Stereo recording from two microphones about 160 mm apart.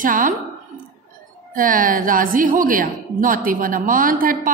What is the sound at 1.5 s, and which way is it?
A woman's voice, 60° right (ahead or behind).